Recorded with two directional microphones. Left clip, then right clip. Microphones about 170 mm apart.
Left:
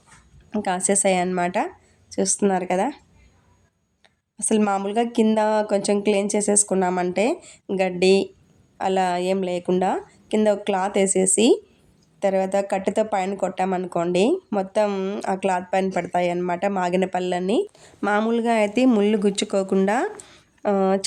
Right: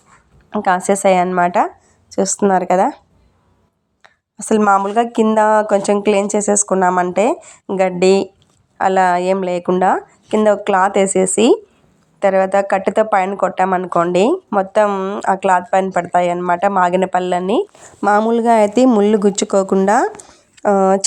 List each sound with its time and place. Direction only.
0.5 s a woman's voice: centre (ahead or behind)
2.1 s speech: 20° right (ahead or behind)
4.0 s a sound: 20° right (ahead or behind)
4.6 s a woman's voice: centre (ahead or behind)
18.1 s speech: 10° right (ahead or behind)